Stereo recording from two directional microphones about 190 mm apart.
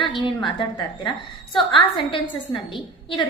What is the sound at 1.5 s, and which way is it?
A woman's voice, 25° left (ahead or behind).